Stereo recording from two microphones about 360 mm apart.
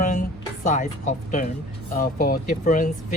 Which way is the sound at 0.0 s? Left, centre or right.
Left.